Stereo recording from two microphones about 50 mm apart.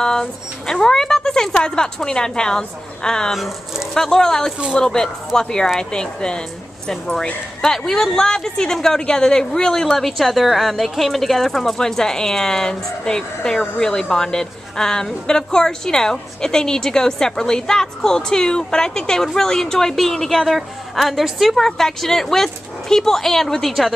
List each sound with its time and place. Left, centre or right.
0.0 s speech: centre
3.3 s speech: centre
3.9 s a woman's voice: centre
7.6 s a woman's voice: centre